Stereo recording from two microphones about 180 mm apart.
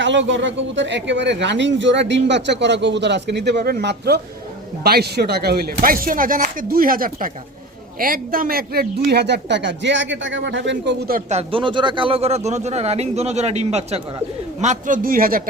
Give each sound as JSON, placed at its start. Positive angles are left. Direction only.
{"t": 0.0, "sound": "speech", "side_deg": -90}
{"t": 11.3, "sound": "speech", "side_deg": -30}